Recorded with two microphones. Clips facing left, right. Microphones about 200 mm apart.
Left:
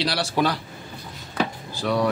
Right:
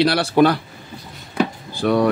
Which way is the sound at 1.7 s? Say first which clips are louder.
Right 6 dB; 55° right (ahead or behind).